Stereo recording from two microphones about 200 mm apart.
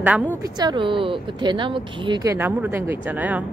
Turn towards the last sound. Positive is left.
turn(degrees=-10)  # may be behind; listen again after turning